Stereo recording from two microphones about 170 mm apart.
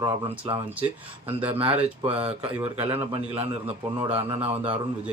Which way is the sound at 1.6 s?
35° right (ahead or behind).